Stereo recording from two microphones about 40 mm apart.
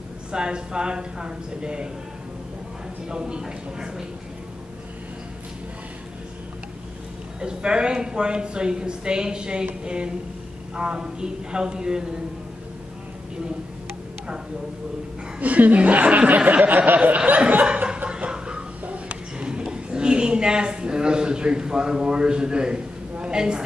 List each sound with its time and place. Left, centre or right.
0.3 s speech: right
3.1 s speech: right
7.3 s speech: right
15.4 s speech: right
17.8 s a sound: right